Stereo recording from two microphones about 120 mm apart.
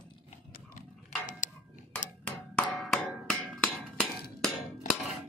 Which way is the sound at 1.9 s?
10° left (ahead or behind).